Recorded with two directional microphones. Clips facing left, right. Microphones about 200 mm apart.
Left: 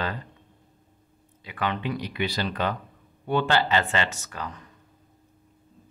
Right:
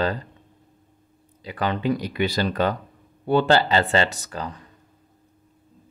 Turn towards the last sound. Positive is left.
turn(degrees=-35)  # may be behind; listen again after turning